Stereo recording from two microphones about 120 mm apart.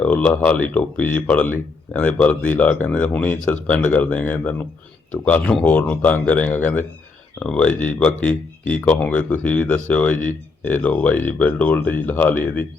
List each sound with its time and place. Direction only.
0.0 s speech: 10° left (ahead or behind)